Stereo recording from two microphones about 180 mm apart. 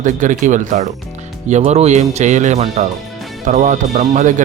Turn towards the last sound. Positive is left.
turn(degrees=-45)  # may be behind; listen again after turning